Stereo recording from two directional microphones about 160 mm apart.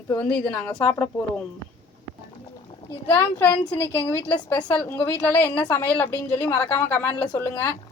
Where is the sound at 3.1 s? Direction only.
15° left (ahead or behind).